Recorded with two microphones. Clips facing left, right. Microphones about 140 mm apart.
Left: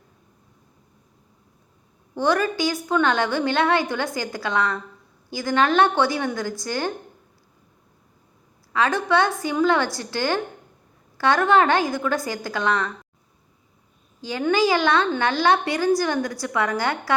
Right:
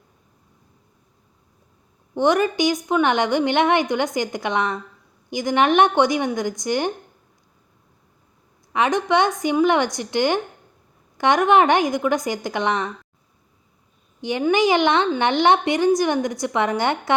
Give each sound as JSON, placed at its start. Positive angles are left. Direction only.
{"t": 2.1, "sound": "a woman's voice", "side_deg": -20}
{"t": 8.7, "sound": "a woman's voice", "side_deg": -20}
{"t": 14.2, "sound": "a woman's voice", "side_deg": -20}